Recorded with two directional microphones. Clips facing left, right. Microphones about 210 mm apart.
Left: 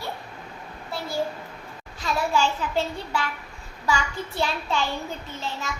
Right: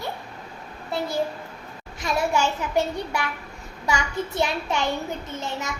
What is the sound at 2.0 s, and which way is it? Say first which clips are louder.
A child's voice: right 1 dB; 15° right (ahead or behind).